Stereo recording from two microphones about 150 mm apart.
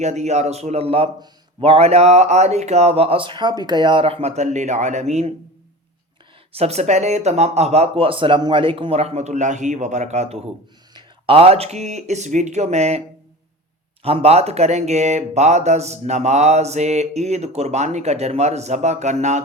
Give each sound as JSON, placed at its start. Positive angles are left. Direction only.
{"t": 0.0, "sound": "speech", "side_deg": -50}
{"t": 6.5, "sound": "speech", "side_deg": -45}
{"t": 10.9, "sound": "speech", "side_deg": -40}
{"t": 14.0, "sound": "speech", "side_deg": -40}